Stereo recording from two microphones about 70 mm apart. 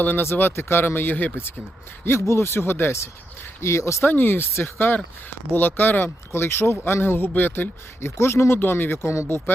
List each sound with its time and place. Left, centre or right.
0.0 s speech: left
2.0 s speech: left
4.1 s speech: left